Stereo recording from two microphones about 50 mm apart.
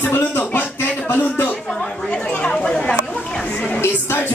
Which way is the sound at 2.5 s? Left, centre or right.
Centre.